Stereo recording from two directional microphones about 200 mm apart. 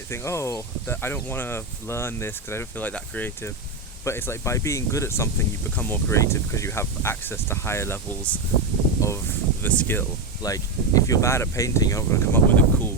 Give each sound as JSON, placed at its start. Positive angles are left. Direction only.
{"t": 0.1, "sound": "speech", "side_deg": 15}